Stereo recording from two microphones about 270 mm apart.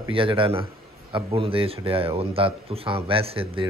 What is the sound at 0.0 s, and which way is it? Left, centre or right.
Speech, centre.